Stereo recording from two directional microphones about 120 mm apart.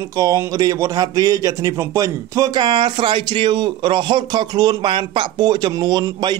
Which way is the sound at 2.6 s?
45° right (ahead or behind).